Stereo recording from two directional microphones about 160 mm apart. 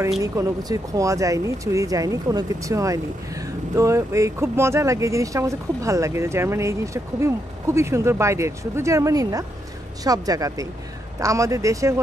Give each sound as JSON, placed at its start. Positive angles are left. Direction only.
{"t": 0.2, "sound": "speech", "side_deg": -20}